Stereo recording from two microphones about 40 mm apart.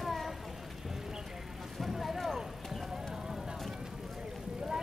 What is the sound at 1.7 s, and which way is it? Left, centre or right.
Vehicle, centre.